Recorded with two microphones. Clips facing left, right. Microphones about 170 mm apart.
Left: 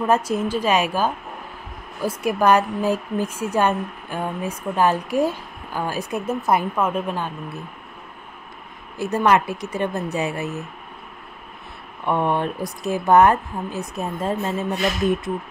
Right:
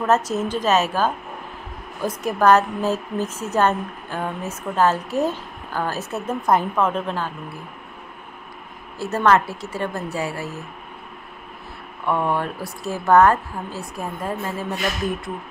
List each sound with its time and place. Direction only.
0.0 s a woman's voice: 10° left (ahead or behind)
8.9 s a woman's voice: 15° left (ahead or behind)
12.1 s speech: 20° left (ahead or behind)